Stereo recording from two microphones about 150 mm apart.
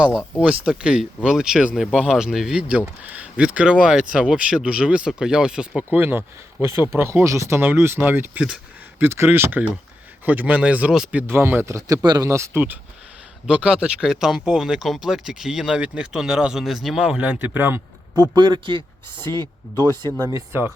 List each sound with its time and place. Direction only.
0.0 s speech: 5° right (ahead or behind)
18.2 s speech: 30° right (ahead or behind)
19.7 s speech: 15° left (ahead or behind)
20.1 s speech: 25° right (ahead or behind)